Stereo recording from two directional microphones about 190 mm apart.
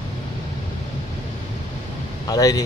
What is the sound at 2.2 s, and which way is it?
Speech, 20° left (ahead or behind).